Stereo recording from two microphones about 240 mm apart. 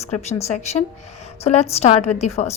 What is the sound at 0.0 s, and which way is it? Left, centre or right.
A woman's voice, left.